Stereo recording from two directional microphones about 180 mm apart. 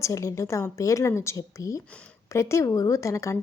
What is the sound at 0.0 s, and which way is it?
Speech, 15° left (ahead or behind).